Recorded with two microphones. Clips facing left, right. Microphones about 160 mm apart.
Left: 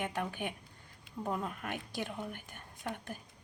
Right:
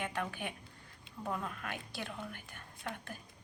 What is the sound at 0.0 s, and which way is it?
A woman's voice, 15° left (ahead or behind).